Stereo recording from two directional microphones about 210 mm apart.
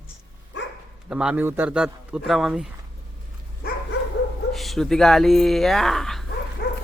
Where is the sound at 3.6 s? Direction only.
50° left (ahead or behind).